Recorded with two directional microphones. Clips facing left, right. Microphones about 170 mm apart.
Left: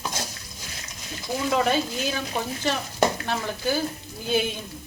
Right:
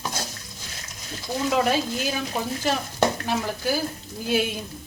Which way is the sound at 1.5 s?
5° right (ahead or behind).